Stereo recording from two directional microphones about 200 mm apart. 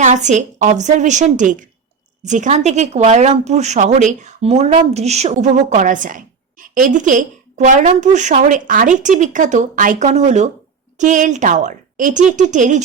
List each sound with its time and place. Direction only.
0.0 s speech: 35° right (ahead or behind)